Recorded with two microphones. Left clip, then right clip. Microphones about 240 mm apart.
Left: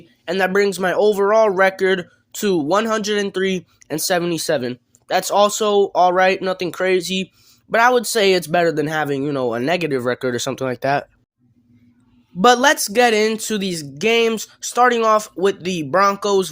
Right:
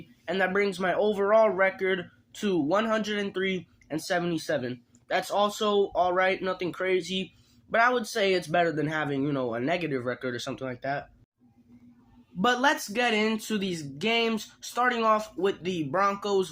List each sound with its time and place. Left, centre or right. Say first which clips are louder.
0.3 s speech: left 9 dB; left
12.4 s speech: left 11 dB; left